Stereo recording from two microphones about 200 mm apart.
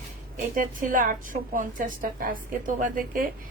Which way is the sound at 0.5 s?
40° right (ahead or behind).